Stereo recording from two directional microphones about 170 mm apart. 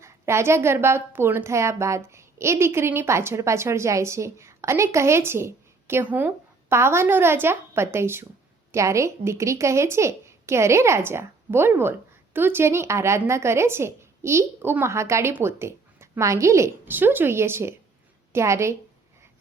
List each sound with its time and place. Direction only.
0.0 s a woman's voice: 15° right (ahead or behind)